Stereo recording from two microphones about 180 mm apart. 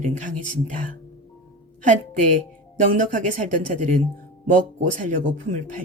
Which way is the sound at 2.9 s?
45° right (ahead or behind).